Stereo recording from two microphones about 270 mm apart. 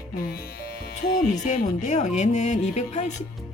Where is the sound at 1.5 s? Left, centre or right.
Left.